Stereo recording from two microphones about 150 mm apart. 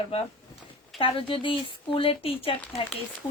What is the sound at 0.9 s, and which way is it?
Speech, 35° left (ahead or behind).